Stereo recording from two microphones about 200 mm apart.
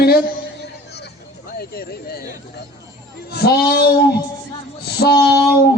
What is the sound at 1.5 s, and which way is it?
Speech, 50° left (ahead or behind).